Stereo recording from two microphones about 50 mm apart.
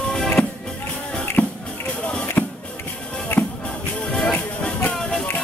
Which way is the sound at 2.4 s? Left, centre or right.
Left.